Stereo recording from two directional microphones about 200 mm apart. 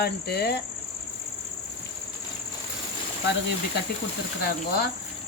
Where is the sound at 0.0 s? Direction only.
55° left (ahead or behind).